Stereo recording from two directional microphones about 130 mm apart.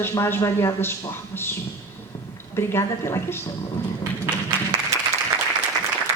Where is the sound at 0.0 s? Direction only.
20° left (ahead or behind).